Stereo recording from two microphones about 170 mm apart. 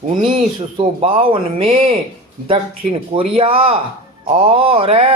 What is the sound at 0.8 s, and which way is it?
Speech, 30° right (ahead or behind).